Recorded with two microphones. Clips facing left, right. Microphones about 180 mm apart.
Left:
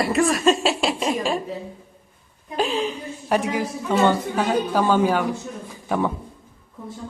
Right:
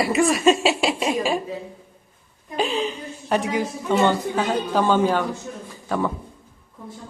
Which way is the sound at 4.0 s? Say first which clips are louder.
Left 2 dB; 10° left (ahead or behind).